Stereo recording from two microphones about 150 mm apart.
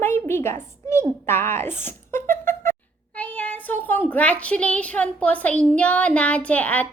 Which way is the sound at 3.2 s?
10° left (ahead or behind).